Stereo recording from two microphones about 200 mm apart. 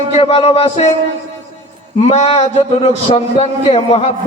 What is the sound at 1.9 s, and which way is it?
A man's voice, 30° left (ahead or behind).